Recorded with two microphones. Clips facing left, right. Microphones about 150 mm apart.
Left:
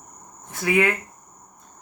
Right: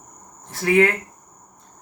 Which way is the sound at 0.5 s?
35° right (ahead or behind).